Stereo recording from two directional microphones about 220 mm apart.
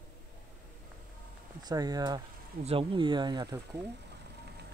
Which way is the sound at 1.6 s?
15° right (ahead or behind).